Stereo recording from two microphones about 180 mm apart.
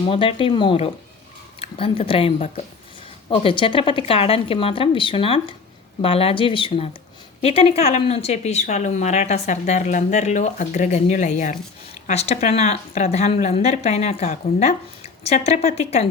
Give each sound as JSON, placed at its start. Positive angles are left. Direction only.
{"t": 0.1, "sound": "speech", "side_deg": 30}